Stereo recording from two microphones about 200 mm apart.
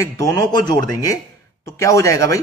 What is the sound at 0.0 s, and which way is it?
A man's voice, 15° left (ahead or behind).